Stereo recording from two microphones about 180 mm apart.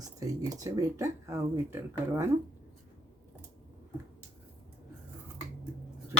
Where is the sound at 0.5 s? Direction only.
20° right (ahead or behind).